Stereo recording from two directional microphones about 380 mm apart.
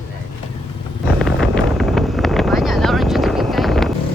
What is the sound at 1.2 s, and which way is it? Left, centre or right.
Vehicle, centre.